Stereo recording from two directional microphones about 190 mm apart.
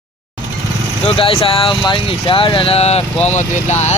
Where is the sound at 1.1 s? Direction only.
30° left (ahead or behind).